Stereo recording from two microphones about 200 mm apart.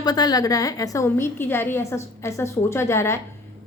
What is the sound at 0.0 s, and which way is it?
A woman's voice, 20° left (ahead or behind).